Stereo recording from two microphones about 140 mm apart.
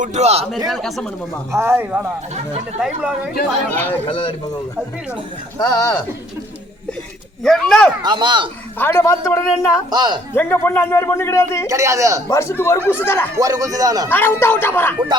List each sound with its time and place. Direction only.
0.0 s a man's voice: 55° right (ahead or behind)
0.7 s speech: centre (ahead or behind)
1.5 s a man's voice: 15° right (ahead or behind)
4.0 s speech: 35° left (ahead or behind)
5.5 s a man's voice: 25° left (ahead or behind)
7.4 s speech: 5° left (ahead or behind)
8.0 s speech: 35° right (ahead or behind)
8.8 s a man's voice: 20° left (ahead or behind)
9.9 s a man's voice: 30° right (ahead or behind)
10.3 s a man's voice: 15° left (ahead or behind)
11.7 s a man's voice: 20° right (ahead or behind)
12.3 s speech: 20° left (ahead or behind)
13.3 s a man's voice: 20° right (ahead or behind)
14.1 s speech: 15° left (ahead or behind)